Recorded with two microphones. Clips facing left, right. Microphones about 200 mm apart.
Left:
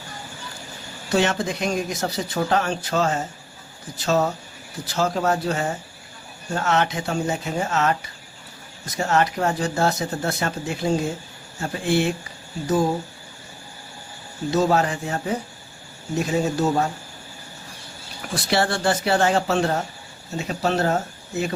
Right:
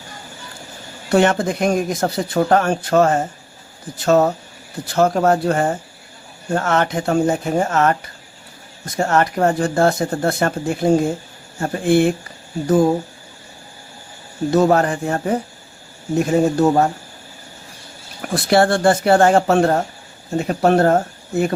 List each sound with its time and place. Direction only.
1.1 s speech: 55° right (ahead or behind)
14.5 s speech: 55° right (ahead or behind)
18.3 s speech: 55° right (ahead or behind)